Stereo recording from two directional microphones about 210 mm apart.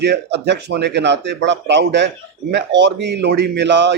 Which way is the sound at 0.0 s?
55° right (ahead or behind).